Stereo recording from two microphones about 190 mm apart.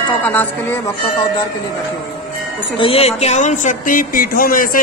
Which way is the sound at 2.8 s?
30° left (ahead or behind).